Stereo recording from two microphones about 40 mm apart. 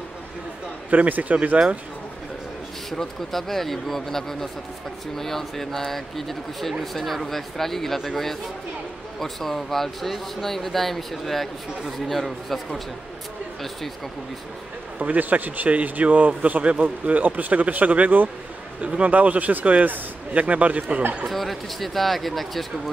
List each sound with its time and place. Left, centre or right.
0.8 s a man's voice: right
2.9 s speech: centre
15.0 s a man's voice: right
21.3 s speech: centre